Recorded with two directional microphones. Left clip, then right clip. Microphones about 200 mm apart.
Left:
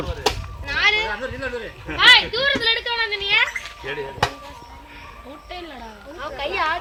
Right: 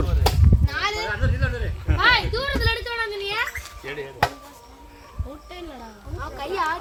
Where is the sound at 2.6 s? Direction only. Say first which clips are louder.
Left 4 dB; 70° right (ahead or behind).